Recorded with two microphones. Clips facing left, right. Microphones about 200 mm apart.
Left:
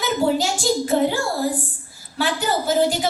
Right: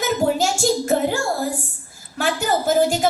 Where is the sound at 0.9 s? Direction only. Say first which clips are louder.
Left 3 dB; 50° right (ahead or behind).